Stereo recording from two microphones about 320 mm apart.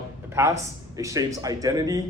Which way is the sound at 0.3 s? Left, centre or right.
Centre.